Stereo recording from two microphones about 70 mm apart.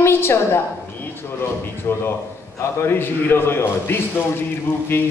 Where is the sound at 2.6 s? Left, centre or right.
Left.